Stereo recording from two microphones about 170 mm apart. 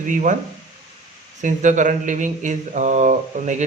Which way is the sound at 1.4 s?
50° right (ahead or behind).